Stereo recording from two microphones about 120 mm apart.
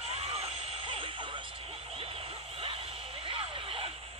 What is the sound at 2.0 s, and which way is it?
Vehicle, 50° right (ahead or behind).